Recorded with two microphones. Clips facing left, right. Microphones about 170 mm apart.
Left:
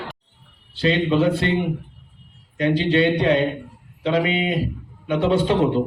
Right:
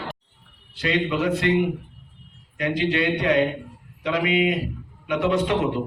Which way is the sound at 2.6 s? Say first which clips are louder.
Left 5 dB; 30° left (ahead or behind).